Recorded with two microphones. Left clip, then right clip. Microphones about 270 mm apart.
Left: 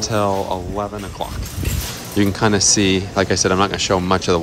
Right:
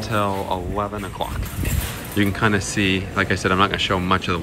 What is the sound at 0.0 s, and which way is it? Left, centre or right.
Speech, centre.